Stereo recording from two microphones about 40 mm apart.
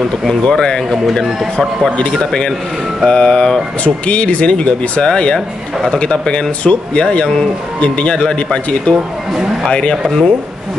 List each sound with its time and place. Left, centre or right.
0.3 s speech: centre
2.1 s speech: centre